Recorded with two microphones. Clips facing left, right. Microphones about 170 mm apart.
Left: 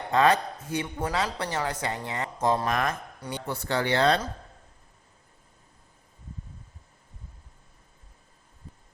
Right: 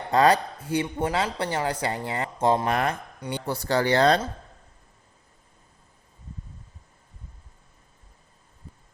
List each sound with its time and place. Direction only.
0.1 s speech: 35° right (ahead or behind)
0.9 s speech: 20° right (ahead or behind); by 4.2 s 40° right (ahead or behind)